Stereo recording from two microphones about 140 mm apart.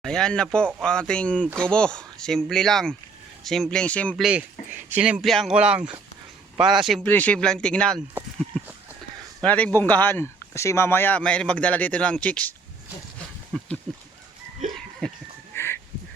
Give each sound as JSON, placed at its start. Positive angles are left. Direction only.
{"t": 0.0, "sound": "speech", "side_deg": 5}
{"t": 4.2, "sound": "speech", "side_deg": -10}
{"t": 7.0, "sound": "speech", "side_deg": 10}
{"t": 9.4, "sound": "speech", "side_deg": 10}
{"t": 13.5, "sound": "a sound", "side_deg": 5}
{"t": 15.0, "sound": "a sound", "side_deg": 5}
{"t": 15.5, "sound": "crow", "side_deg": 15}